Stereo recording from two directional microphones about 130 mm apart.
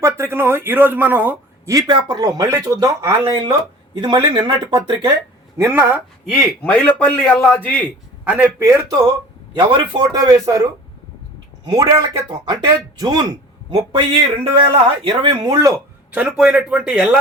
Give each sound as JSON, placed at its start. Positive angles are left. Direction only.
{"t": 0.0, "sound": "a man's voice", "side_deg": -20}
{"t": 1.9, "sound": "speech", "side_deg": -35}
{"t": 5.5, "sound": "a man's voice", "side_deg": -20}
{"t": 6.3, "sound": "a man's voice", "side_deg": 10}
{"t": 8.2, "sound": "a man's voice", "side_deg": -10}
{"t": 8.6, "sound": "speech", "side_deg": -20}
{"t": 9.6, "sound": "speech", "side_deg": -35}
{"t": 16.1, "sound": "a man's voice", "side_deg": -5}